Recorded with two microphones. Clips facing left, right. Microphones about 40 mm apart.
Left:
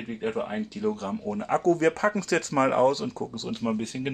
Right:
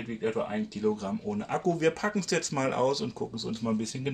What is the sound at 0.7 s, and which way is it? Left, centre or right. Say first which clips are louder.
Speech: even; left.